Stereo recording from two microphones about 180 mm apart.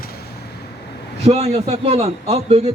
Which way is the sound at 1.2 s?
35° right (ahead or behind).